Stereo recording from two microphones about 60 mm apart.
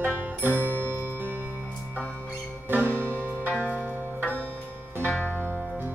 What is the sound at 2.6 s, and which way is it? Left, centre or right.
Music, right.